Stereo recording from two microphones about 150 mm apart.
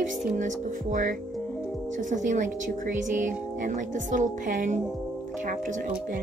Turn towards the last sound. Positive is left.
turn(degrees=-60)  # may be behind; listen again after turning